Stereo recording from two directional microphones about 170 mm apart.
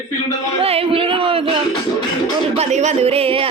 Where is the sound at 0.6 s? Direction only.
35° right (ahead or behind).